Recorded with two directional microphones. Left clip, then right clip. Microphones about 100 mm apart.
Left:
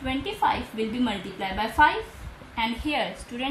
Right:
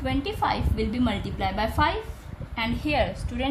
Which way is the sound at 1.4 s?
90° right.